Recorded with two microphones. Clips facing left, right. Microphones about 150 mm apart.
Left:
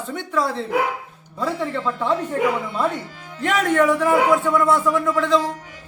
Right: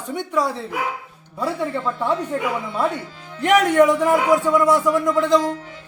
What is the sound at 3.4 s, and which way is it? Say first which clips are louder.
A man's voice: right 4 dB; 15° right (ahead or behind).